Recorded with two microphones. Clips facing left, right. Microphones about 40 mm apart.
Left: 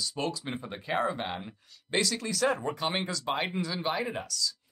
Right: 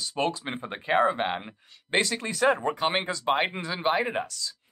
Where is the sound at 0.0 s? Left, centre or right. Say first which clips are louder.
Right 5 dB; right.